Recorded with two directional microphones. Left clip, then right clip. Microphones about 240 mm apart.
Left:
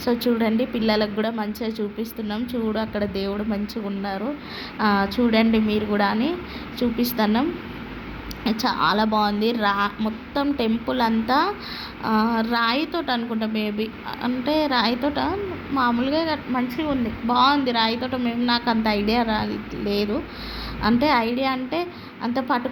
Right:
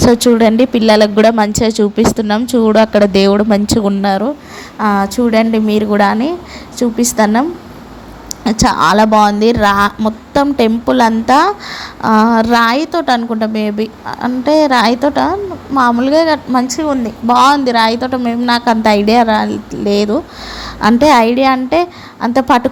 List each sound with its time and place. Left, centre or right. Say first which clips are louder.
0.0 s a woman's voice: right 13 dB; right
8.4 s a woman's voice: right 11 dB; right
17.2 s a woman's voice: right 10 dB; right